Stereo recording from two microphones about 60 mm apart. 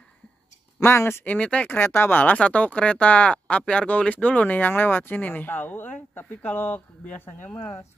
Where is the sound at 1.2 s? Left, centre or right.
Left.